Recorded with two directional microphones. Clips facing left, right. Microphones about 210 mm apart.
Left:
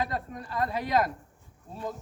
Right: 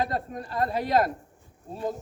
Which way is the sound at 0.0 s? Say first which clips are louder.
Right 3 dB; 30° right (ahead or behind).